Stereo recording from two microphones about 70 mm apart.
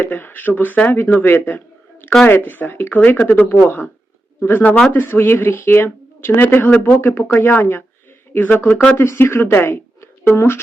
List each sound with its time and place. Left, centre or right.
0.0 s speech: left